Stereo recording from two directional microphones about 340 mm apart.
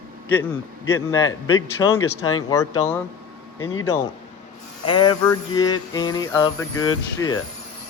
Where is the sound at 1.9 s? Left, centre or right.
Left.